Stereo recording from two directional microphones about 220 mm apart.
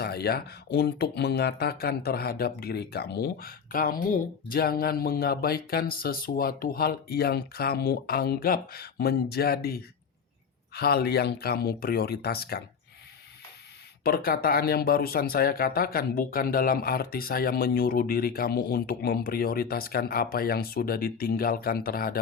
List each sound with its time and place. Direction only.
0.0 s speech: 45° left (ahead or behind)
14.0 s speech: 40° left (ahead or behind)